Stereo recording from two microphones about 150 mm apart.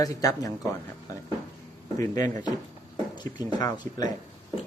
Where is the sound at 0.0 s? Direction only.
25° left (ahead or behind).